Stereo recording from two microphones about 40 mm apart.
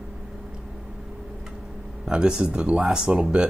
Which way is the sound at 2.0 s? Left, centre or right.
Centre.